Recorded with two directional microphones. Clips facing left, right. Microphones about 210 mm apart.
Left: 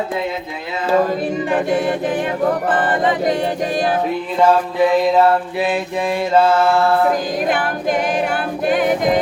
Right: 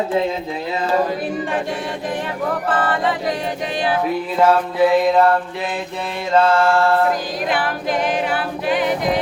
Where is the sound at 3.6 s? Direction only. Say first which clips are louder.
Left 3 dB; 45° left (ahead or behind).